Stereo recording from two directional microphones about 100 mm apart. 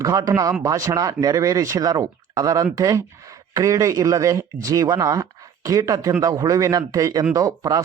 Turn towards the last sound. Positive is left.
turn(degrees=-35)  # may be behind; listen again after turning